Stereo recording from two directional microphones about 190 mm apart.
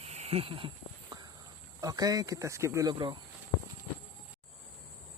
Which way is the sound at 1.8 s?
20° right (ahead or behind).